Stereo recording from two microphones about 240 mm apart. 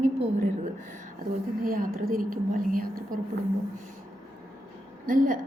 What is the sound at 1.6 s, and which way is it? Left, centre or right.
A woman's voice, right.